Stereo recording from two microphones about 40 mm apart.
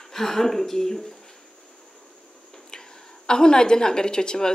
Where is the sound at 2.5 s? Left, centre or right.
Centre.